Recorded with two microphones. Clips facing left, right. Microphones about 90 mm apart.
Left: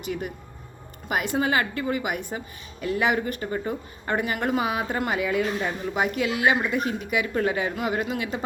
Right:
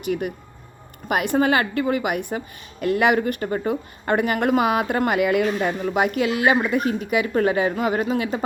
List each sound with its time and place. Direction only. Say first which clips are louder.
0.0 s a woman's voice: right 6 dB; 55° right (ahead or behind)